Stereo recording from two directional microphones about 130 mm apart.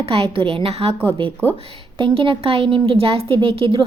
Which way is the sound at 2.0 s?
40° right (ahead or behind).